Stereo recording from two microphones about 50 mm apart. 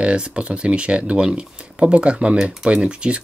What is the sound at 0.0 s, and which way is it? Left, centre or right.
Speech, centre.